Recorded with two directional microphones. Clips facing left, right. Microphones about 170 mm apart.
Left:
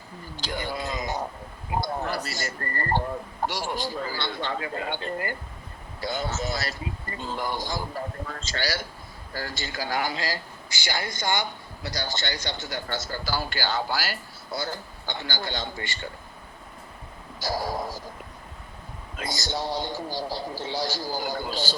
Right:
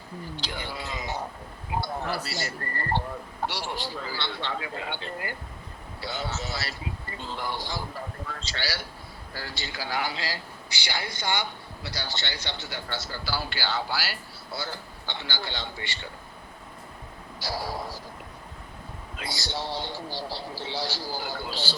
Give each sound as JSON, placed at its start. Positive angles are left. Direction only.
{"t": 0.3, "sound": "a sound", "side_deg": 45}
{"t": 2.2, "sound": "a man's voice", "side_deg": 45}
{"t": 17.4, "sound": "a man's voice", "side_deg": 45}
{"t": 19.1, "sound": "a man's voice", "side_deg": 45}